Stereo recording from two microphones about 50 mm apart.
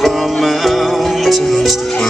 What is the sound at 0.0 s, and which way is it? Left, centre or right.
Music, centre.